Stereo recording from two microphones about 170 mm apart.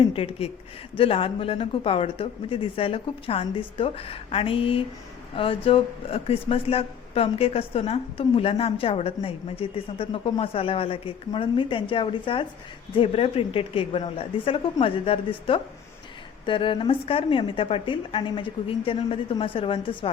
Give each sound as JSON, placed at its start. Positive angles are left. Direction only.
{"t": 0.0, "sound": "speech", "side_deg": 35}